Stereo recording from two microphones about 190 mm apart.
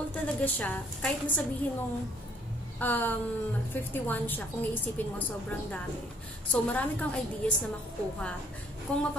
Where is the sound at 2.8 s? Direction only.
10° left (ahead or behind).